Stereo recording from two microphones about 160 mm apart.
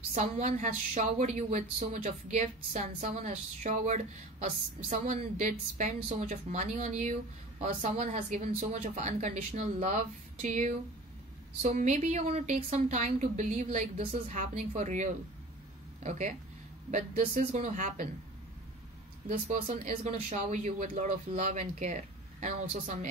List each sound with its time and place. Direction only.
0.1 s a woman's voice: 50° right (ahead or behind)
19.3 s a woman's voice: 55° right (ahead or behind)